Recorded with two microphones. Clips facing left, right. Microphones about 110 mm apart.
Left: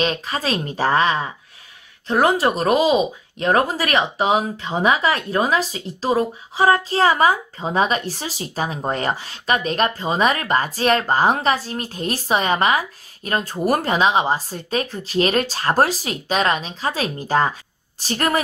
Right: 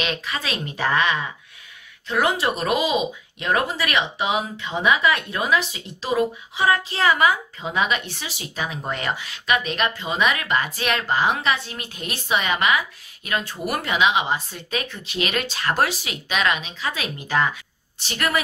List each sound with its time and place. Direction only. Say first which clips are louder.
0.0 s speech: left 5 dB; 35° left (ahead or behind)